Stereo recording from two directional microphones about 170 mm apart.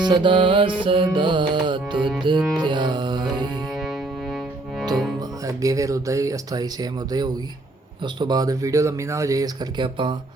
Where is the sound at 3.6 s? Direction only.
Centre (ahead or behind).